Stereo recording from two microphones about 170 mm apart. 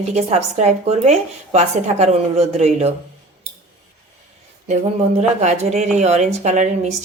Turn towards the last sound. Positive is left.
turn(degrees=-45)  # may be behind; listen again after turning